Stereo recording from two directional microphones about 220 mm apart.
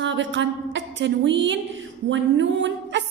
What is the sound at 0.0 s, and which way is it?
A woman's voice, 55° right (ahead or behind).